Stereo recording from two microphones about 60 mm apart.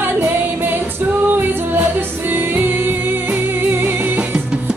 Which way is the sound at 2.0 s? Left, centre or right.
Right.